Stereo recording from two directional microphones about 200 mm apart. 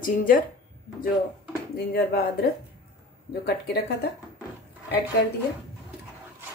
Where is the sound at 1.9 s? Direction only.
50° left (ahead or behind).